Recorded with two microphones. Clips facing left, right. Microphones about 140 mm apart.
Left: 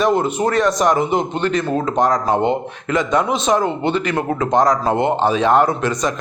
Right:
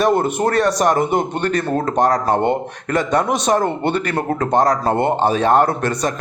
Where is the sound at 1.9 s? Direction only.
65° right (ahead or behind).